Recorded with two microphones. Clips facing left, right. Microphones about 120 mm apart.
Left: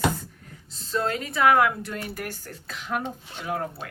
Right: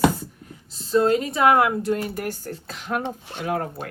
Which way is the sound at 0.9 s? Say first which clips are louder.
Right 7 dB; 25° right (ahead or behind).